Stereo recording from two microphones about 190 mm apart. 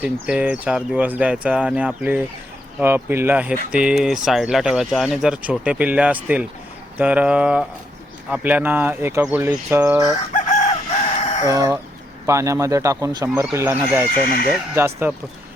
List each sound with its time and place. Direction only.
0.0 s speech: 5° right (ahead or behind)
10.4 s chicken: 40° left (ahead or behind)
11.4 s speech: 20° right (ahead or behind)
14.1 s speech: 50° left (ahead or behind)
14.8 s speech: 15° right (ahead or behind)